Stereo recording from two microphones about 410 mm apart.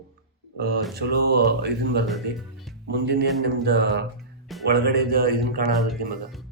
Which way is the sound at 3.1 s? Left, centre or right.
Right.